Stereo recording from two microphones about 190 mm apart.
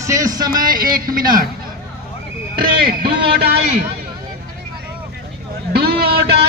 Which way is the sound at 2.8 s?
55° right (ahead or behind).